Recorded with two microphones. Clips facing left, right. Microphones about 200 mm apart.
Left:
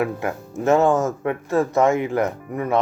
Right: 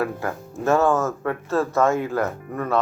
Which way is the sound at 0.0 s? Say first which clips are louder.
Left 2 dB; 20° left (ahead or behind).